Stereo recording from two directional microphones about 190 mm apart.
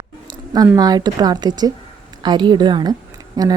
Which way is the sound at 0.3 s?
20° right (ahead or behind).